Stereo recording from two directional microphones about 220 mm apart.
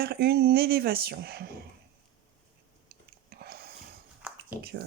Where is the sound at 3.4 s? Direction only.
45° right (ahead or behind).